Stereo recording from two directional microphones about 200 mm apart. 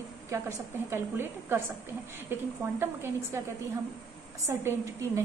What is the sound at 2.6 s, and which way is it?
Speech, 15° right (ahead or behind).